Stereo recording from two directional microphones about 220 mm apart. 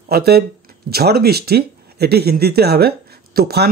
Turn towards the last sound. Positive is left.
turn(degrees=-45)  # may be behind; listen again after turning